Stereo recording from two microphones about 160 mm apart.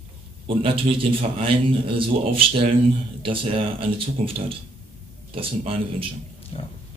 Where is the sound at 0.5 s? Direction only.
35° right (ahead or behind).